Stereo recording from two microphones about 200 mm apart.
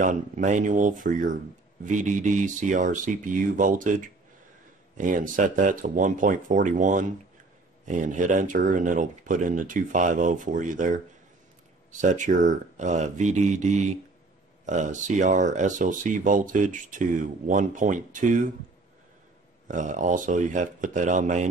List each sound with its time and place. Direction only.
0.0 s speech: 40° right (ahead or behind)
19.7 s speech: 40° right (ahead or behind)